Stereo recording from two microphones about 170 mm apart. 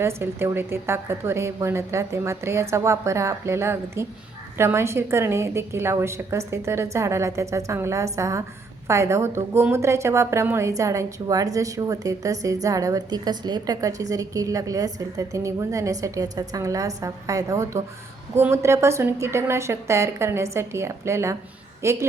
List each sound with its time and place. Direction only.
0.0 s a woman's voice: 15° right (ahead or behind)